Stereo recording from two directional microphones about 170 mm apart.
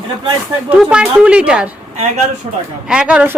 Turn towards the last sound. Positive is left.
turn(degrees=-5)  # may be behind; listen again after turning